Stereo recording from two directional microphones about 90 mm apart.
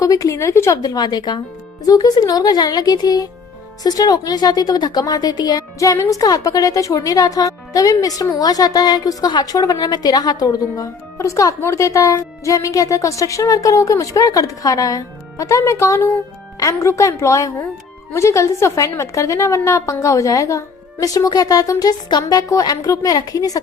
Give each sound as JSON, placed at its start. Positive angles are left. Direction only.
{"t": 0.0, "sound": "a woman's voice", "side_deg": 40}
{"t": 0.8, "sound": "a woman's voice", "side_deg": 45}